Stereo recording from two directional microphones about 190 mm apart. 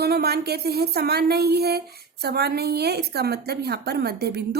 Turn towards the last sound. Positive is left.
turn(degrees=-55)  # may be behind; listen again after turning